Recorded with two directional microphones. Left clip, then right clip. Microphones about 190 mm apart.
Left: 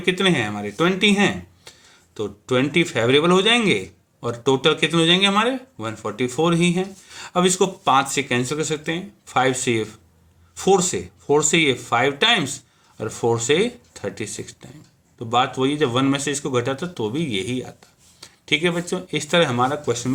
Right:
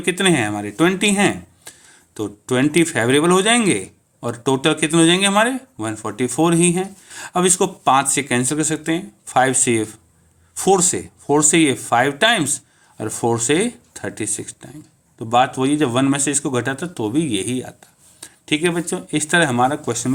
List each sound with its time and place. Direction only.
0.0 s speech: 40° right (ahead or behind)